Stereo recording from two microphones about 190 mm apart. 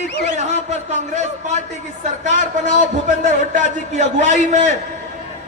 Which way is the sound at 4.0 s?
40° right (ahead or behind).